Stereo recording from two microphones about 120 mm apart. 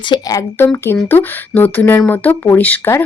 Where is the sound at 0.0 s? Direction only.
35° left (ahead or behind).